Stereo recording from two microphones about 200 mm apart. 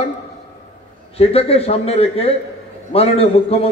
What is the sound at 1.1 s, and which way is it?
A man's voice, 30° left (ahead or behind).